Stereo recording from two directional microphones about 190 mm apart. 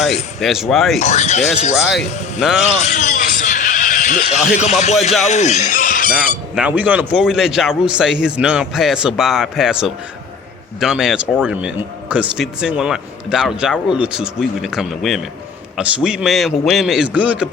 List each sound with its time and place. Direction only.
0.0 s speech: centre (ahead or behind)
0.9 s speech: 35° left (ahead or behind)
2.4 s speech: centre (ahead or behind)
2.6 s speech: 40° left (ahead or behind)
6.6 s speech: 10° right (ahead or behind)